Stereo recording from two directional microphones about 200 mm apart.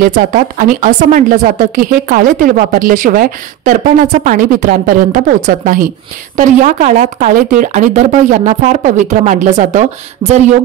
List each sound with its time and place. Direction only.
0.0 s speech: 45° right (ahead or behind)